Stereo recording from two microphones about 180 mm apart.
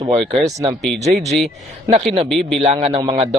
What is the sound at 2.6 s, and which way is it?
Speech, 30° right (ahead or behind).